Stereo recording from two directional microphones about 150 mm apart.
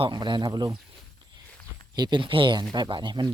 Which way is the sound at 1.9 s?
30° right (ahead or behind).